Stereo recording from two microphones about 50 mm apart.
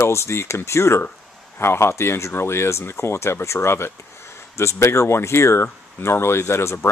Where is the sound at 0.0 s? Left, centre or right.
Left.